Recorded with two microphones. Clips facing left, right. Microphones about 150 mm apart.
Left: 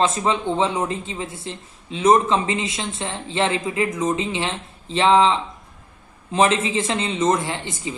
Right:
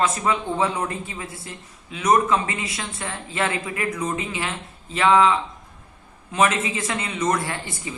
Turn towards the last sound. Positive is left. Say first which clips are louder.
# left 2 dB
turn(degrees=20)  # may be behind; listen again after turning